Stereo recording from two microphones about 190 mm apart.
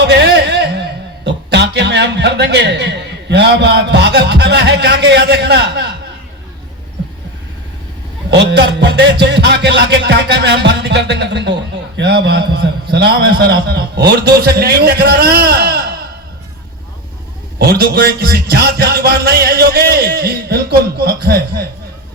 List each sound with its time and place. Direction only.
0.0 s a sound: 65° right (ahead or behind)
3.2 s a man's voice: 65° right (ahead or behind)
8.3 s a man's voice: 60° right (ahead or behind)
17.6 s a man's voice: 55° right (ahead or behind)